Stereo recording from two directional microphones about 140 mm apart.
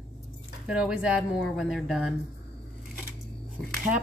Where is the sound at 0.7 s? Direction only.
5° right (ahead or behind).